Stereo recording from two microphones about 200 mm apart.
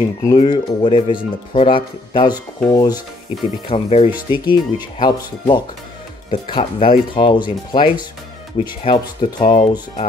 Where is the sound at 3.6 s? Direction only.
30° left (ahead or behind).